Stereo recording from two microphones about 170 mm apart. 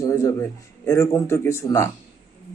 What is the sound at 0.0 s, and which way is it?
Speech, 20° left (ahead or behind).